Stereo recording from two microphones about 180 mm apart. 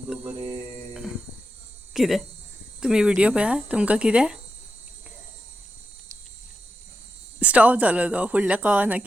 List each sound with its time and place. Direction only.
0.1 s mantra: 5° right (ahead or behind)
1.9 s speech: centre (ahead or behind)
7.3 s speech: 10° right (ahead or behind)